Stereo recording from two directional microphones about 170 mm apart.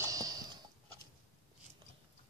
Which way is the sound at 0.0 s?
20° right (ahead or behind).